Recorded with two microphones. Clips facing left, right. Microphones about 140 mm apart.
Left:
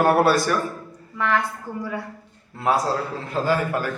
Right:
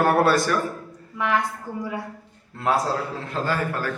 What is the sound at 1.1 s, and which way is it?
Speech, 15° right (ahead or behind).